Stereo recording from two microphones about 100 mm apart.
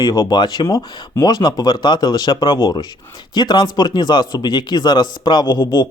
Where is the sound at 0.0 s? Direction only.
40° left (ahead or behind).